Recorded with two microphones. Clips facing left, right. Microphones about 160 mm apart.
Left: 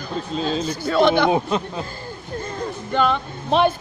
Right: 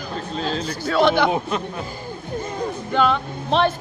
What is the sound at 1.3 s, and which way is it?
Speech, 20° left (ahead or behind).